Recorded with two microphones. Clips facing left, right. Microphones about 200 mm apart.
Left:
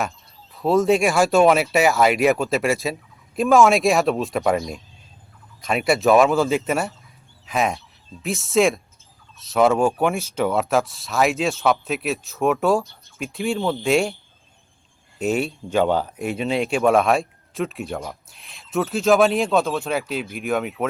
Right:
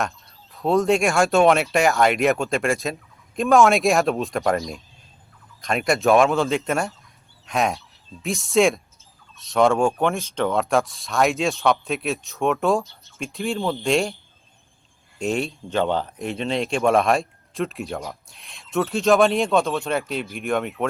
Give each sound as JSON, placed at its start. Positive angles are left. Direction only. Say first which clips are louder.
{"t": 0.5, "sound": "speech", "louder": "left 2 dB", "side_deg": 0}
{"t": 15.2, "sound": "speech", "louder": "left 2 dB", "side_deg": 5}